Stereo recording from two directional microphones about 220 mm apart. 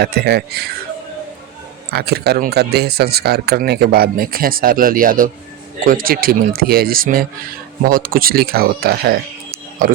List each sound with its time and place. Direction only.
0.0 s speech: 45° right (ahead or behind)
1.9 s speech: 45° right (ahead or behind)